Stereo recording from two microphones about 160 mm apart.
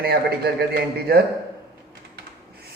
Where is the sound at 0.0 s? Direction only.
75° right (ahead or behind).